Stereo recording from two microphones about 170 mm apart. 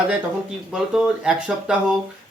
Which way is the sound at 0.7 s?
5° right (ahead or behind).